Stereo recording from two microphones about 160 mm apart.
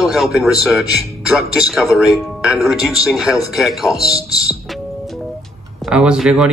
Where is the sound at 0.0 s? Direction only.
Centre (ahead or behind).